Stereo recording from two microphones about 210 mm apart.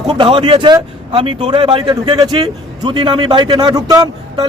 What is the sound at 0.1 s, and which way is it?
Speech, 25° right (ahead or behind).